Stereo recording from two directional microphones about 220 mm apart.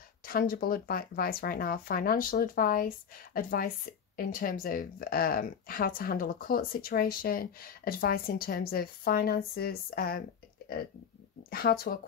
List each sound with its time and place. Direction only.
0.2 s speech: 40° left (ahead or behind)
11.5 s speech: 45° left (ahead or behind)